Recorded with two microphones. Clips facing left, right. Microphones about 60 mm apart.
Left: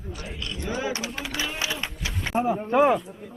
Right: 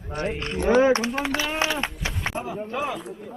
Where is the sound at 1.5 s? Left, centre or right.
Right.